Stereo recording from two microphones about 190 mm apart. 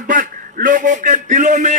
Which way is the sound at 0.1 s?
45° right (ahead or behind).